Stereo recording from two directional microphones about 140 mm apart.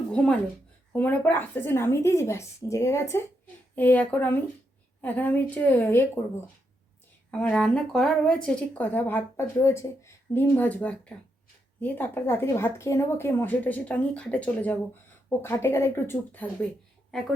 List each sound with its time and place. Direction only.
0.1 s speech: 5° left (ahead or behind)
7.3 s speech: 10° left (ahead or behind)
17.1 s a woman's voice: 5° left (ahead or behind)